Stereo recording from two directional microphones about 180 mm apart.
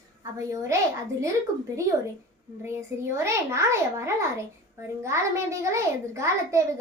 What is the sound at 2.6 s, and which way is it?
A child's voice, 15° right (ahead or behind).